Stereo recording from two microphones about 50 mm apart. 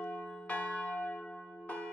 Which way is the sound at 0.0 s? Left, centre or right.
Left.